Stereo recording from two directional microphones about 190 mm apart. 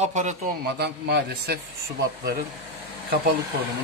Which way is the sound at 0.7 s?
60° right (ahead or behind).